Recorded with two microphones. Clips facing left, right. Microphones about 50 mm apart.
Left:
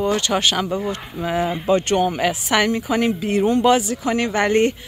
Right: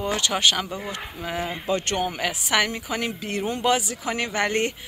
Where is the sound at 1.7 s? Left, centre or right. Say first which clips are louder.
Left 7 dB; left.